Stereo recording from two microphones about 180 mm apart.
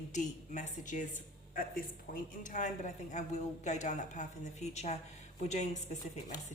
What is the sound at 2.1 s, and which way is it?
A woman's voice, 50° left (ahead or behind).